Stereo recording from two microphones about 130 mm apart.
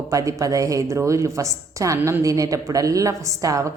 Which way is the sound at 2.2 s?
25° right (ahead or behind).